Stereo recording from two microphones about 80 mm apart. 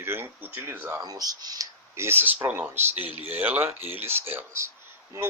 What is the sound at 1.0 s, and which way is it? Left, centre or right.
Speech, right.